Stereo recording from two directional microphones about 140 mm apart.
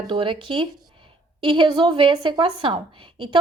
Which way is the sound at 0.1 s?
35° right (ahead or behind).